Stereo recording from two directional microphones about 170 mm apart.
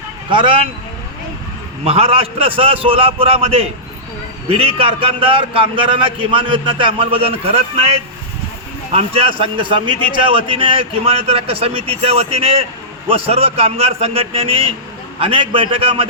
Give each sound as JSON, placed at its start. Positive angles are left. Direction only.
{"t": 0.3, "sound": "speech", "side_deg": -30}
{"t": 1.8, "sound": "a man's voice", "side_deg": -35}